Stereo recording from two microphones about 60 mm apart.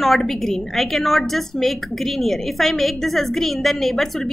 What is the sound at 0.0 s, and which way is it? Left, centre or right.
A woman's voice, centre.